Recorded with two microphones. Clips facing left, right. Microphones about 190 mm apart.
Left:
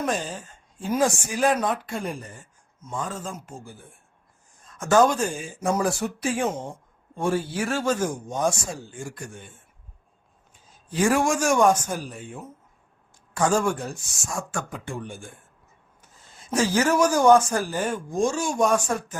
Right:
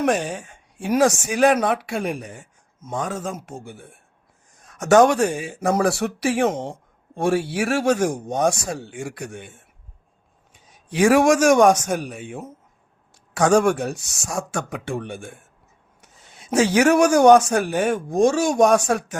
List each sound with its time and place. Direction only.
0.0 s speech: 70° right (ahead or behind)
10.7 s speech: 75° right (ahead or behind)